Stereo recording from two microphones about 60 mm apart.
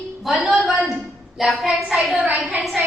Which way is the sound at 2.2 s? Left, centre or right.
Right.